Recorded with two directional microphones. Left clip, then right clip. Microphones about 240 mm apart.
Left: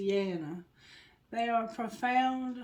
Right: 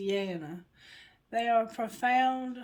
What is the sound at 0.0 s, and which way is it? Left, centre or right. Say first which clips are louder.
Speech: left 1 dB; right.